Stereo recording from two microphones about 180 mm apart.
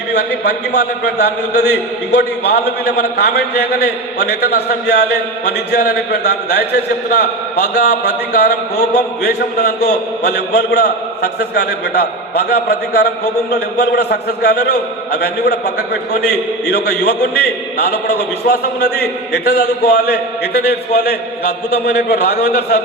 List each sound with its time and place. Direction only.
0.1 s a man's voice: 65° left (ahead or behind)